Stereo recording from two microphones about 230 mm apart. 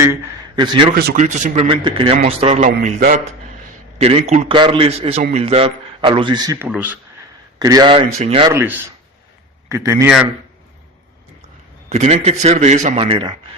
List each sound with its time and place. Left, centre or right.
0.0 s a man's voice: centre
0.9 s a man's voice: right
8.4 s a man's voice: centre
11.9 s a man's voice: right